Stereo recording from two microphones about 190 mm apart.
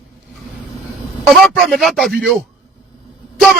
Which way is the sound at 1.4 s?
Centre (ahead or behind).